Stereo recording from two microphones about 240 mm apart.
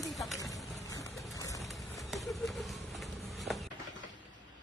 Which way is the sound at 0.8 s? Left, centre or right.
Centre.